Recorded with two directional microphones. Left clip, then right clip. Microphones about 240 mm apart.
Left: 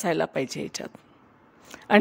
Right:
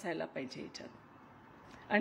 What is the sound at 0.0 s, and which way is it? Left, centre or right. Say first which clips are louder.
Speech: left 14 dB; left.